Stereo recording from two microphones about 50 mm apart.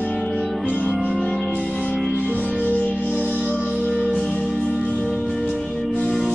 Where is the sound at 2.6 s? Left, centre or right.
Left.